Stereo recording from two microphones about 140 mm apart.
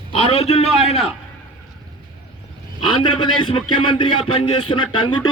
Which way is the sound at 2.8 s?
40° left (ahead or behind).